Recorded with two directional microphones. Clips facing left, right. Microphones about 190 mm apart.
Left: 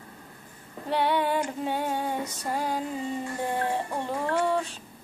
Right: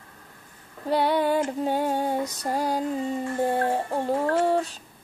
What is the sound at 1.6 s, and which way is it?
Music, 40° right (ahead or behind).